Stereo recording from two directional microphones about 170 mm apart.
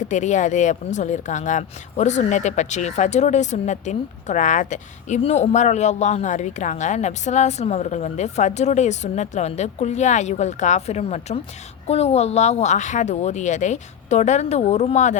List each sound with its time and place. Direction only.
0.0 s speech: 45° left (ahead or behind)